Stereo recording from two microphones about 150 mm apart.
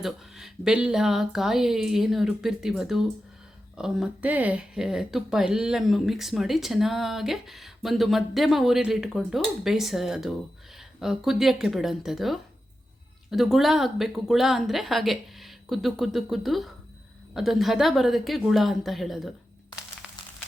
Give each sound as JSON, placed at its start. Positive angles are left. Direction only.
{"t": 0.0, "sound": "speech", "side_deg": -5}